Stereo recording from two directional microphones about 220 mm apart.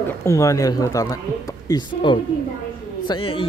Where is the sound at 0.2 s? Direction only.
15° left (ahead or behind).